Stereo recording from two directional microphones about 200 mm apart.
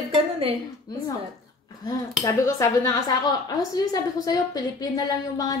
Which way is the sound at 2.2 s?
15° left (ahead or behind).